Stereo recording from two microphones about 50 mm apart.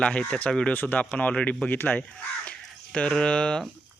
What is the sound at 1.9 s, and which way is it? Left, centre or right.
Speech, centre.